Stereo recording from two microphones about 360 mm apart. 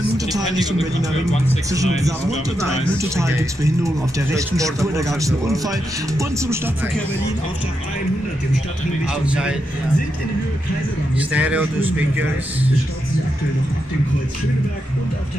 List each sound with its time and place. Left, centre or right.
0.3 s speech: centre
3.0 s speech: centre
9.0 s a man's voice: centre
11.3 s a man's voice: centre